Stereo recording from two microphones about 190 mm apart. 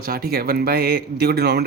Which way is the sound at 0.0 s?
55° right (ahead or behind).